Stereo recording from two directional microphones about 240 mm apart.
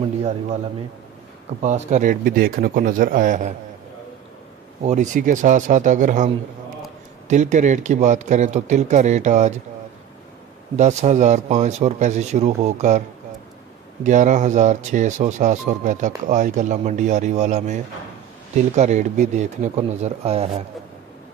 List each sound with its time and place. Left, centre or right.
1.6 s speech: right
4.8 s speech: right
10.8 s speech: right
14.0 s speech: right